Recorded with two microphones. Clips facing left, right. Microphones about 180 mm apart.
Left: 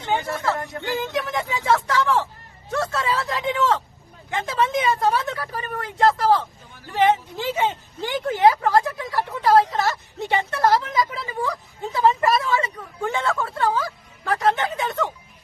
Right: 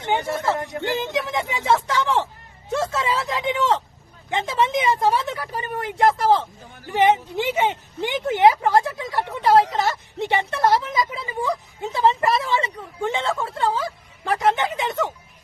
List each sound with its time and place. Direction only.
0.0 s speech: 25° right (ahead or behind)